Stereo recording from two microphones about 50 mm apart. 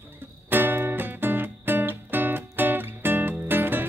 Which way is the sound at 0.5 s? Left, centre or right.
Right.